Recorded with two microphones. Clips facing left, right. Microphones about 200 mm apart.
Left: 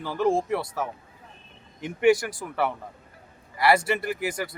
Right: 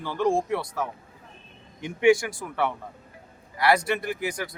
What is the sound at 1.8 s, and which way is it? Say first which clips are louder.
Speech: right 1 dB; centre (ahead or behind).